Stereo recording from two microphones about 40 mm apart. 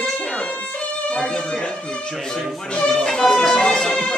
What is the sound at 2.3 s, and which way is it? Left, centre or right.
Speech, centre.